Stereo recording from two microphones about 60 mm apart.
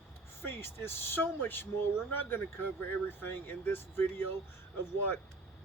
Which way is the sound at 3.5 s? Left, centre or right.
Left.